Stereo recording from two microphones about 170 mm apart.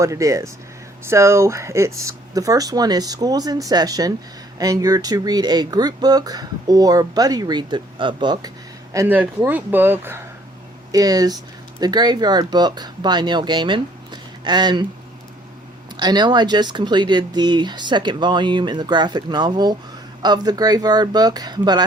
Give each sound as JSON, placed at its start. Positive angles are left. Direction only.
{"t": 0.0, "sound": "speech", "side_deg": -20}
{"t": 8.9, "sound": "speech", "side_deg": -15}
{"t": 16.0, "sound": "speech", "side_deg": -25}